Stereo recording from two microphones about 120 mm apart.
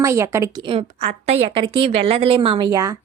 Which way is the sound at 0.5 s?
45° right (ahead or behind).